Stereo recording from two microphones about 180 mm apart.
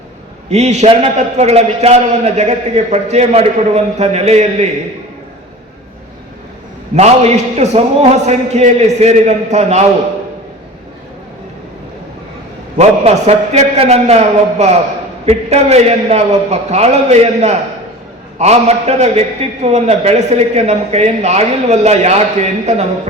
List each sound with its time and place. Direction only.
0.5 s a man's voice: 40° right (ahead or behind)
6.9 s a man's voice: 35° right (ahead or behind)
12.7 s a man's voice: 35° right (ahead or behind)